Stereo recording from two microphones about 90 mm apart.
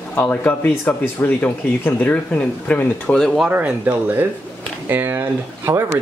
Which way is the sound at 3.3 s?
15° right (ahead or behind).